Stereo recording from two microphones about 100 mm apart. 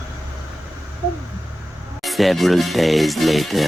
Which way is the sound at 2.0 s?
Centre (ahead or behind).